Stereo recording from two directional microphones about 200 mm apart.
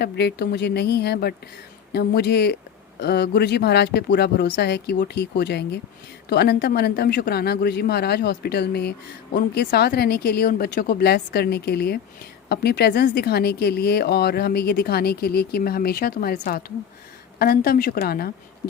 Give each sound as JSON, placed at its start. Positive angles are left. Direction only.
{"t": 0.0, "sound": "speech", "side_deg": 55}